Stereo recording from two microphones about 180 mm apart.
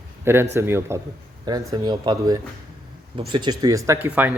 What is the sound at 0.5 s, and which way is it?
Speech, 15° right (ahead or behind).